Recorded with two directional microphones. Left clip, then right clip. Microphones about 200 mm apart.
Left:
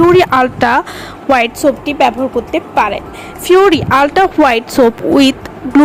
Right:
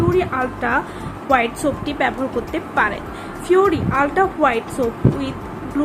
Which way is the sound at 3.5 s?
40° left (ahead or behind).